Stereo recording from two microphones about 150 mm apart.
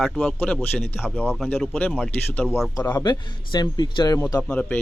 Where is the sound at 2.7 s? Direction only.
25° left (ahead or behind).